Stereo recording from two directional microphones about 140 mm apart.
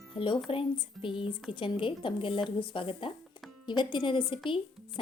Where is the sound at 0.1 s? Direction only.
40° left (ahead or behind).